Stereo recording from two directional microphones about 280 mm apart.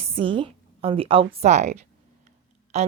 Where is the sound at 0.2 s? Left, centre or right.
Centre.